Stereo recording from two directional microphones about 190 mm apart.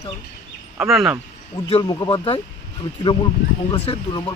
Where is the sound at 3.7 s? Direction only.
25° left (ahead or behind).